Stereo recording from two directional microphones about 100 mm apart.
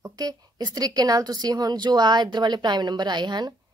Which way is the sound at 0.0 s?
40° right (ahead or behind).